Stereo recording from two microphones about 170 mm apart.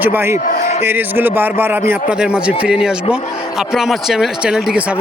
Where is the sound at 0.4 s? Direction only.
40° left (ahead or behind).